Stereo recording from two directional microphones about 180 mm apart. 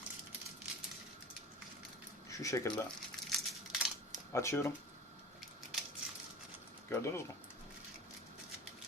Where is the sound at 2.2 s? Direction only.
20° left (ahead or behind).